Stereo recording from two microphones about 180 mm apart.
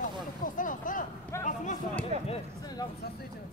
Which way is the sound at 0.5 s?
45° left (ahead or behind).